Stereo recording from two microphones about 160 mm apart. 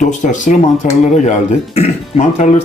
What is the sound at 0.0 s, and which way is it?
Speech, 50° left (ahead or behind).